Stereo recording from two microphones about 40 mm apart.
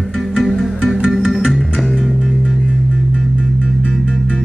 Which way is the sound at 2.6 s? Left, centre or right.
Centre.